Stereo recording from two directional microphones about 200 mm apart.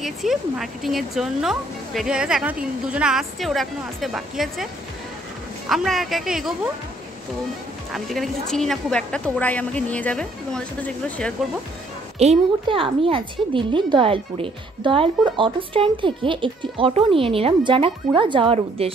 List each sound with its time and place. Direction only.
0.0 s speech: centre (ahead or behind)
5.7 s speech: centre (ahead or behind)
7.9 s speech: centre (ahead or behind)
12.2 s a woman's voice: 30° right (ahead or behind)